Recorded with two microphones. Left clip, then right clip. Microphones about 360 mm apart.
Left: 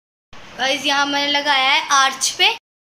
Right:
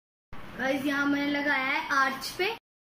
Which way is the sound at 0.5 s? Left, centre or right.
Left.